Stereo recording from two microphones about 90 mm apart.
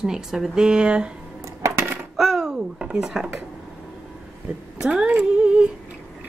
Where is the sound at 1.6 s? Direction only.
25° right (ahead or behind).